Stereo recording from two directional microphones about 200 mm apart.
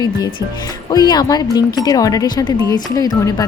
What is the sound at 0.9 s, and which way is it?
Speech, 20° left (ahead or behind).